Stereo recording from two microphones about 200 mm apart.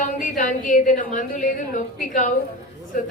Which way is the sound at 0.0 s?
40° left (ahead or behind).